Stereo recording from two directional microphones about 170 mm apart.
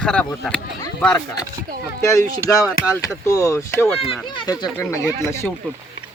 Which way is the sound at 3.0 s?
20° left (ahead or behind).